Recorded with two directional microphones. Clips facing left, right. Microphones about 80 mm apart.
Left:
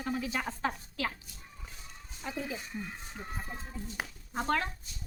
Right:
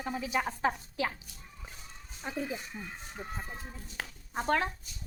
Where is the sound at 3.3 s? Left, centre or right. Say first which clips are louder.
Left 1 dB; centre.